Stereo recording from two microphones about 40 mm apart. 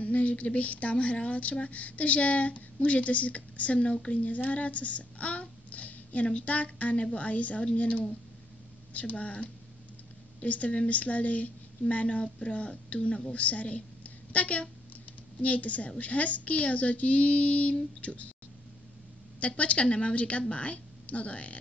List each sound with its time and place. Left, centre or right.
0.0 s a sound: left
0.6 s a child's voice: left
19.4 s speech: left